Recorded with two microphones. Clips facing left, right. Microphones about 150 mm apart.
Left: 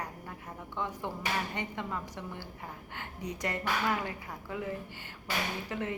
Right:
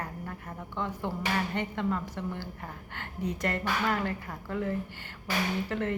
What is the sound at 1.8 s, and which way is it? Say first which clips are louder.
Speech: right 6 dB; 10° left (ahead or behind).